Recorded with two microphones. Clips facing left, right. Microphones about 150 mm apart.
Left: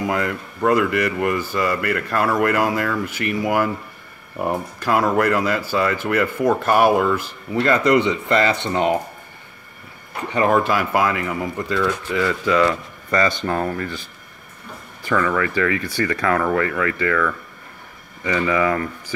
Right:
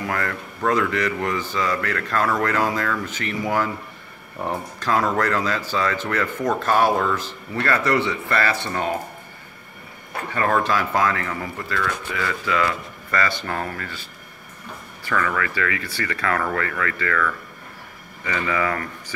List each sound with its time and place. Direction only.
0.0 s speech: 15° left (ahead or behind)
10.3 s speech: 15° left (ahead or behind)
15.0 s speech: 20° left (ahead or behind)